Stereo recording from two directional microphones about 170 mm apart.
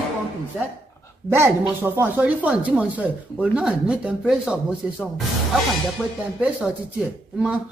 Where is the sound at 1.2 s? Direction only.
15° right (ahead or behind).